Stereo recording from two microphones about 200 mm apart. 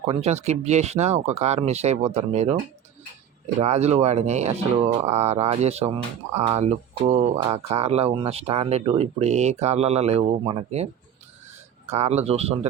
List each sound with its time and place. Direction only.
0.0 s speech: 30° right (ahead or behind)
3.6 s speech: 30° right (ahead or behind)
11.9 s speech: 35° right (ahead or behind)